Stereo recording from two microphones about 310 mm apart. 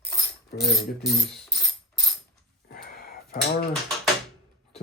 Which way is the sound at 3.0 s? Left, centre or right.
Left.